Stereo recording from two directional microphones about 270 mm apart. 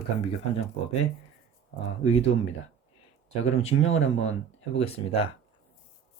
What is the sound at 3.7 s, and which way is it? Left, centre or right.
Speech, left.